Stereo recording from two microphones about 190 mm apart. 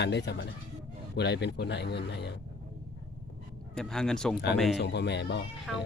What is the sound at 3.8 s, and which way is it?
Speech, 5° left (ahead or behind).